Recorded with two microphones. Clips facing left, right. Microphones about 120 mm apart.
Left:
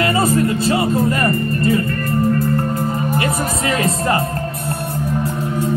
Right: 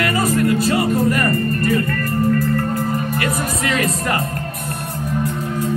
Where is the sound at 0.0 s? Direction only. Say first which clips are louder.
Left 2 dB; 25° left (ahead or behind).